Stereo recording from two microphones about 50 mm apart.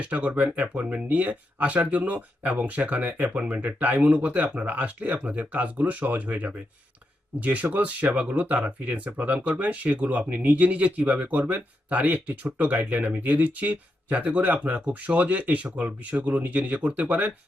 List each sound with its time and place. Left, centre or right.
0.0 s speech: right